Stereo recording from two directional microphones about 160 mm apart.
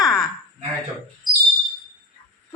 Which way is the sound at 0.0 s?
Centre (ahead or behind).